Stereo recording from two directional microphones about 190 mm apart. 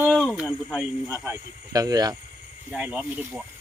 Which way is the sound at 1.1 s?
15° right (ahead or behind).